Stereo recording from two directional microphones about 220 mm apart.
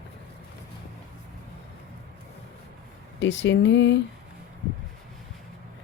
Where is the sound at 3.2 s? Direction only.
55° left (ahead or behind).